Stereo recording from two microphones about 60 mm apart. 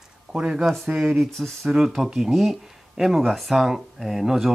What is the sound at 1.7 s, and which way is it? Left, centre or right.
Speech, centre.